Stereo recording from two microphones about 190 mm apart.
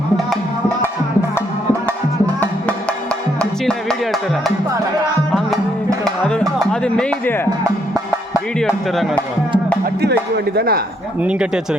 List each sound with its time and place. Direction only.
3.7 s music: centre (ahead or behind)
6.8 s speech: 5° left (ahead or behind)
8.5 s speech: centre (ahead or behind)
9.8 s music: 60° right (ahead or behind)
11.2 s speech: 5° right (ahead or behind)